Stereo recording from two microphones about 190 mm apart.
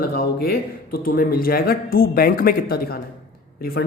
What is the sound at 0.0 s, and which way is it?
Speech, 55° left (ahead or behind).